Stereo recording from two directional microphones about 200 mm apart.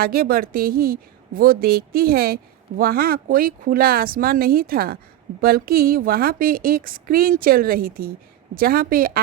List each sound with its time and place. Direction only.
0.0 s a woman's voice: 50° right (ahead or behind)